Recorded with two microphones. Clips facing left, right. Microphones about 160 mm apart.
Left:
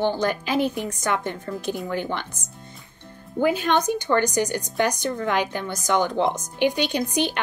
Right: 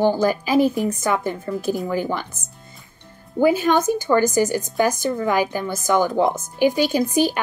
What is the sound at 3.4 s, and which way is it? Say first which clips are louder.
A woman's voice: right 4 dB; 5° right (ahead or behind).